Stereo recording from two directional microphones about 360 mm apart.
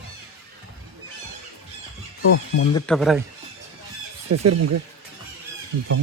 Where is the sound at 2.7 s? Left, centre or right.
Centre.